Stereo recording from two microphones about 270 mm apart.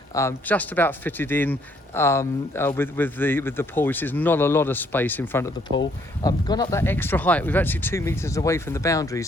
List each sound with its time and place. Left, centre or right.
0.1 s speech: centre